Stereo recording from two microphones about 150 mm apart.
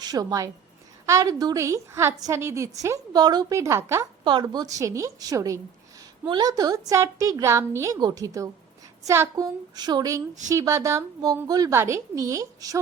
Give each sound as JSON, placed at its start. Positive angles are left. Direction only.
{"t": 0.0, "sound": "a woman's voice", "side_deg": -25}
{"t": 4.2, "sound": "a woman's voice", "side_deg": -30}